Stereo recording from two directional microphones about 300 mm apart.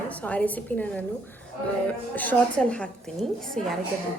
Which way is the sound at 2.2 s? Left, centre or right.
Centre.